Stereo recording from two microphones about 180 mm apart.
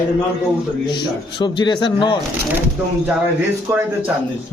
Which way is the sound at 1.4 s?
25° left (ahead or behind).